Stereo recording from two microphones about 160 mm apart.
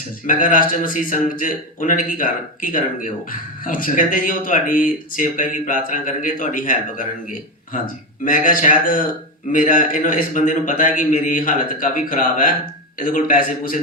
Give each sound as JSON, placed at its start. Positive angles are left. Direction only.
{"t": 0.3, "sound": "speech", "side_deg": 55}
{"t": 8.2, "sound": "speech", "side_deg": 55}